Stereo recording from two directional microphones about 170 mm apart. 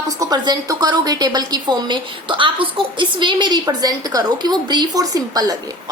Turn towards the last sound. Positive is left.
turn(degrees=-20)  # may be behind; listen again after turning